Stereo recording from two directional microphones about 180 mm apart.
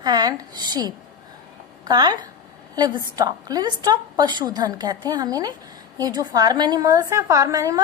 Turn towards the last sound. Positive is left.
turn(degrees=-20)  # may be behind; listen again after turning